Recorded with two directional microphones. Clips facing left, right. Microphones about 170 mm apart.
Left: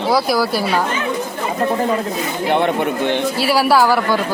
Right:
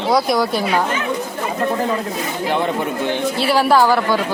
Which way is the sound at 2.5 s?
65° left (ahead or behind).